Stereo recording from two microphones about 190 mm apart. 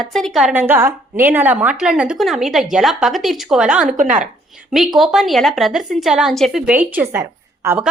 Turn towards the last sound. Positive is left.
turn(degrees=-15)  # may be behind; listen again after turning